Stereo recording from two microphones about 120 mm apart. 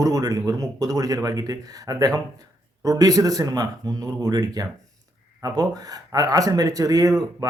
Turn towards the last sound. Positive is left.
turn(degrees=-30)  # may be behind; listen again after turning